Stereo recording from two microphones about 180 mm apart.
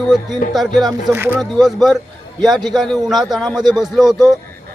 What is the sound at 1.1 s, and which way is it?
A man's voice, 10° right (ahead or behind).